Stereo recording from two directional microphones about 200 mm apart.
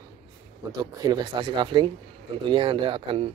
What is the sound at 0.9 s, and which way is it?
Speech, 20° right (ahead or behind).